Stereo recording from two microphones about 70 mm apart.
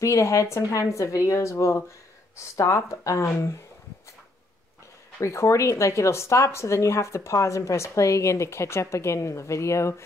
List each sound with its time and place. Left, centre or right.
0.0 s speech: left
5.2 s speech: left